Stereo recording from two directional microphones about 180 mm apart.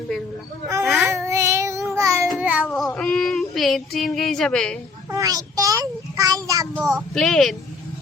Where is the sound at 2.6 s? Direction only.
5° left (ahead or behind).